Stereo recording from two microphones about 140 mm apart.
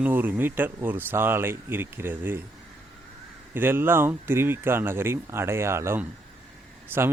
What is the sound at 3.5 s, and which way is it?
Speech, 15° right (ahead or behind).